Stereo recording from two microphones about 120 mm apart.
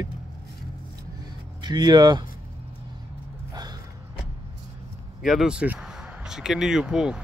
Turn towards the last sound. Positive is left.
turn(degrees=-5)  # may be behind; listen again after turning